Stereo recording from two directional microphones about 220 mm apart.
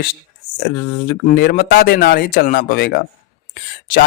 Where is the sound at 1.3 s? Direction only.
45° left (ahead or behind).